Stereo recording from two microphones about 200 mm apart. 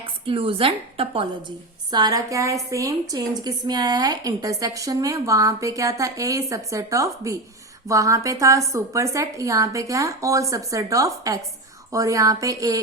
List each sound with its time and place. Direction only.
0.0 s a woman's voice: 25° right (ahead or behind)